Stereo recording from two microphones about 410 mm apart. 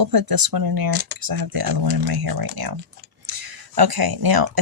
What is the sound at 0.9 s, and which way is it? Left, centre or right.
Speech, right.